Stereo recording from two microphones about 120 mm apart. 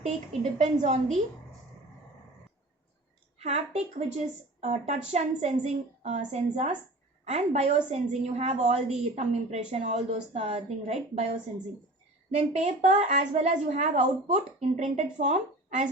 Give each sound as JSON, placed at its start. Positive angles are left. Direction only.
{"t": 0.6, "sound": "a woman's voice", "side_deg": -75}
{"t": 3.3, "sound": "a woman's voice", "side_deg": -65}
{"t": 7.3, "sound": "a woman's voice", "side_deg": -65}
{"t": 15.2, "sound": "speech", "side_deg": -85}